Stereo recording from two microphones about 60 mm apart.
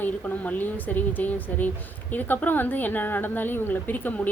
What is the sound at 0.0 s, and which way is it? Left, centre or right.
A woman's voice, left.